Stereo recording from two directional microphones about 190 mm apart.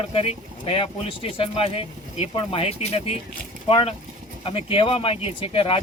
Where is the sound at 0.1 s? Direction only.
30° left (ahead or behind).